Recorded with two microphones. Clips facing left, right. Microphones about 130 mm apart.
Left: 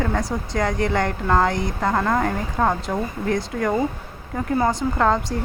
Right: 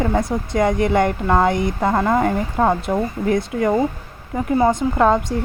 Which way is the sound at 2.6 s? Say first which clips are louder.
Right 3 dB; 15° right (ahead or behind).